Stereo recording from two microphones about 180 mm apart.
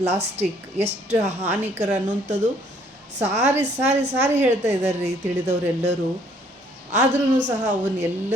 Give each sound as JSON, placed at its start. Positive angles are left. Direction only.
{"t": 0.0, "sound": "a woman's voice", "side_deg": -35}
{"t": 1.4, "sound": "a woman's voice", "side_deg": -10}
{"t": 1.8, "sound": "a woman's voice", "side_deg": -40}
{"t": 6.9, "sound": "a woman's voice", "side_deg": -40}